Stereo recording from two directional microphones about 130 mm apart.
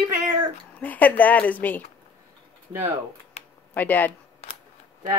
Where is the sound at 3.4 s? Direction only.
55° left (ahead or behind).